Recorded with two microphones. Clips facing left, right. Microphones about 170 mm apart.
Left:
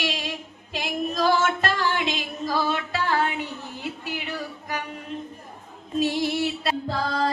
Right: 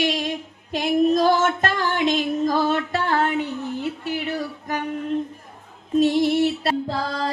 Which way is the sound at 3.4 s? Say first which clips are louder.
Right 8 dB; 10° left (ahead or behind).